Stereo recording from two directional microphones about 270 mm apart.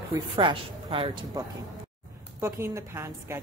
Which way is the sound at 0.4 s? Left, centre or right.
Centre.